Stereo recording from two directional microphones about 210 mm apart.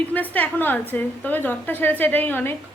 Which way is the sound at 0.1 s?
10° left (ahead or behind).